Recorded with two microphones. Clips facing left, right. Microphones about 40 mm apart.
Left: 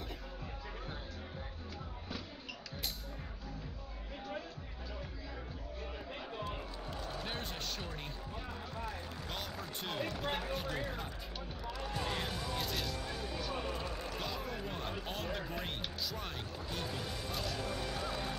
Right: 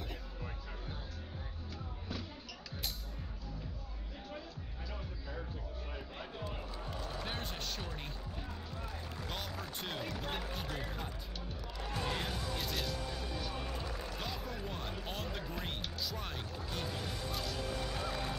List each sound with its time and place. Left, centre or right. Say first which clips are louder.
7.2 s music: even; centre
9.3 s speech: even; centre
12.2 s speech: left 1 dB; centre
17.3 s a sound: left 2 dB; centre